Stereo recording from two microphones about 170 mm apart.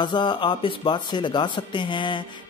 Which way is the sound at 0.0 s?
25° left (ahead or behind).